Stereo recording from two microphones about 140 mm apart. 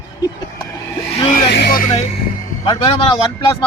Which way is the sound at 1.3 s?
70° left (ahead or behind).